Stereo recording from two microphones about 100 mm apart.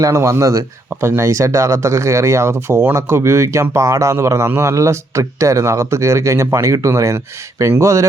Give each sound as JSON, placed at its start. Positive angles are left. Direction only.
{"t": 0.0, "sound": "a man's voice", "side_deg": -30}